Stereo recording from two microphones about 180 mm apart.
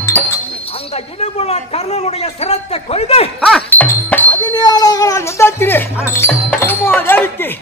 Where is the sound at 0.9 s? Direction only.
35° left (ahead or behind).